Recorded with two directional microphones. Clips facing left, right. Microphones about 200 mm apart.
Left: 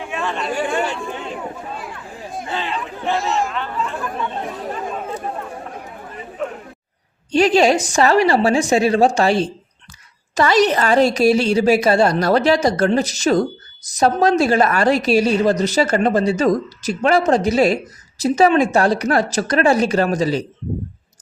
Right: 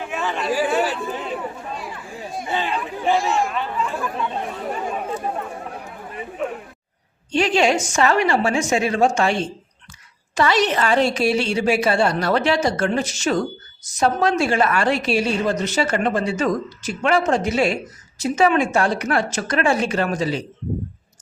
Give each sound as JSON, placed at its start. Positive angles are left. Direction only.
{"t": 0.1, "sound": "a sound", "side_deg": 0}
{"t": 2.5, "sound": "chatter", "side_deg": -10}
{"t": 3.2, "sound": "chatter", "side_deg": 0}
{"t": 3.5, "sound": "chatter", "side_deg": -10}
{"t": 7.3, "sound": "a woman's voice", "side_deg": 40}